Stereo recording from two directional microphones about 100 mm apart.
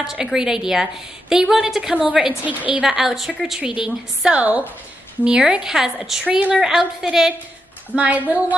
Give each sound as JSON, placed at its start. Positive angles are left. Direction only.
{"t": 0.0, "sound": "a woman's voice", "side_deg": -5}